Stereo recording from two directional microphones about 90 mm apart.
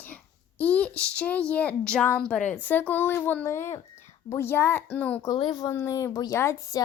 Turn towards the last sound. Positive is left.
turn(degrees=40)  # may be behind; listen again after turning